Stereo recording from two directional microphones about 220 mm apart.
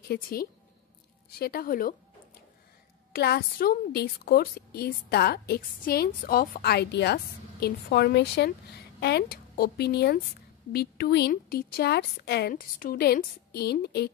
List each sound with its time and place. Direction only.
0.1 s a woman's voice: 45° left (ahead or behind)
3.1 s a woman's voice: 45° left (ahead or behind)